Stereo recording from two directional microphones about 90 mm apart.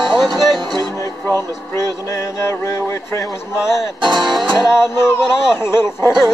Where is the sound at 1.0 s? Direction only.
35° left (ahead or behind).